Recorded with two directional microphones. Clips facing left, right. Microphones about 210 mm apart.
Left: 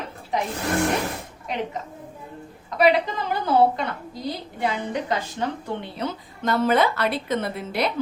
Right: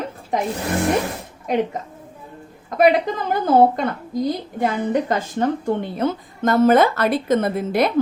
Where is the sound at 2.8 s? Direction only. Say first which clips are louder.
Right 3 dB; 50° right (ahead or behind).